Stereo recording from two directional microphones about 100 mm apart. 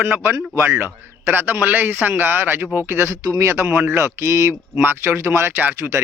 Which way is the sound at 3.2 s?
35° right (ahead or behind).